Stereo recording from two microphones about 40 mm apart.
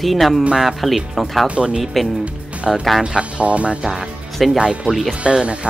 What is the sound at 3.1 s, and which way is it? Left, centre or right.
Speech, right.